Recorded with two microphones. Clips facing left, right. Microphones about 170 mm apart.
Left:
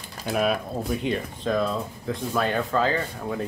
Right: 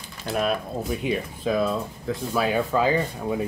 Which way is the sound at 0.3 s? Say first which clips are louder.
Left 1 dB; centre (ahead or behind).